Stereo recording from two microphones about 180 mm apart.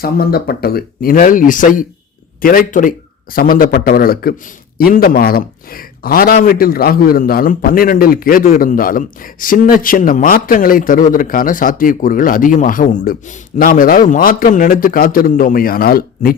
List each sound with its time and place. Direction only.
0.0 s speech: 60° left (ahead or behind)